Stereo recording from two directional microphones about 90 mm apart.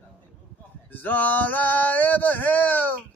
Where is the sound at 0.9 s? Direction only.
20° left (ahead or behind).